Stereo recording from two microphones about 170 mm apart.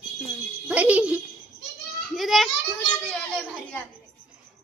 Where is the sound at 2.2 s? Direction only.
Centre (ahead or behind).